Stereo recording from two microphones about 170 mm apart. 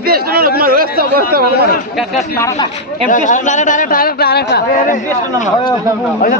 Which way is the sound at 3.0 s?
50° left (ahead or behind).